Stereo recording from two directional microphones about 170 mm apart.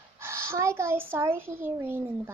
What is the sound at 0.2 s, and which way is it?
A child's voice, 15° right (ahead or behind).